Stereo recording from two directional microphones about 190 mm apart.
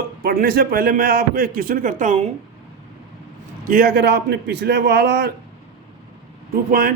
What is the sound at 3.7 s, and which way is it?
Speech, 50° right (ahead or behind).